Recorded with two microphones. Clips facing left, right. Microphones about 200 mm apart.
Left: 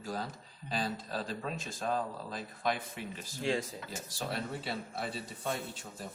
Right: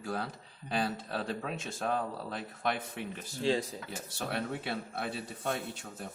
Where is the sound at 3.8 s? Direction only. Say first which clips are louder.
Right 1 dB; 60° right (ahead or behind).